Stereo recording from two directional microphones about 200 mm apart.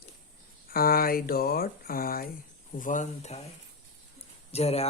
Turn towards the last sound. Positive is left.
turn(degrees=30)  # may be behind; listen again after turning